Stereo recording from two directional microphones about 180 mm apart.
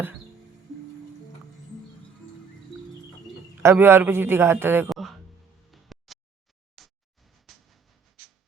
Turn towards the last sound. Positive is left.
turn(degrees=0)  # may be behind; listen again after turning